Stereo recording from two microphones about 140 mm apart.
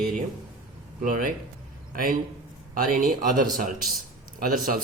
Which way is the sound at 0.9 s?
80° right.